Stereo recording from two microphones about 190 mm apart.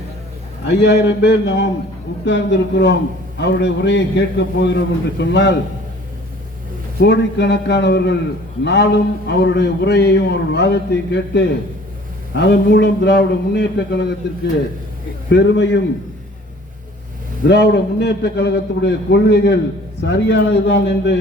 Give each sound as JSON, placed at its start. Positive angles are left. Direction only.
{"t": 0.7, "sound": "a man's voice", "side_deg": 65}
{"t": 7.0, "sound": "a man's voice", "side_deg": 65}
{"t": 15.3, "sound": "a man's voice", "side_deg": 70}
{"t": 17.5, "sound": "a man's voice", "side_deg": 65}